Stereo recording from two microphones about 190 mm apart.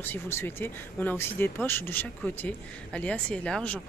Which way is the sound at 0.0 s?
10° left (ahead or behind).